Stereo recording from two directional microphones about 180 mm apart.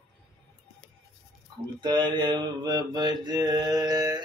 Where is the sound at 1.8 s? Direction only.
25° right (ahead or behind).